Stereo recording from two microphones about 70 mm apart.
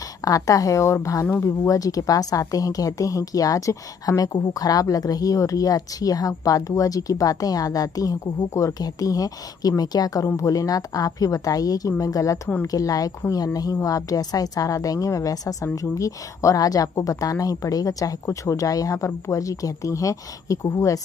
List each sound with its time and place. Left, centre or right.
0.2 s a woman's voice: left